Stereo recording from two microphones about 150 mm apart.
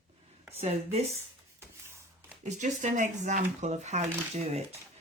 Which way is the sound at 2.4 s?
55° right (ahead or behind).